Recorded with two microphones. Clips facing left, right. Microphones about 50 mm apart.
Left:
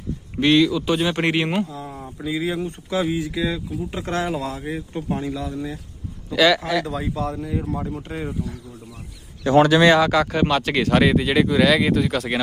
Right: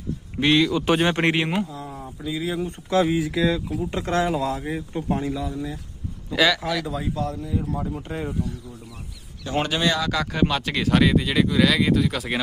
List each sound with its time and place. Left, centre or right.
0.3 s speech: centre
4.0 s speech: left
4.6 s speech: centre
7.3 s speech: centre
7.6 s speech: centre
9.5 s speech: left
10.1 s speech: centre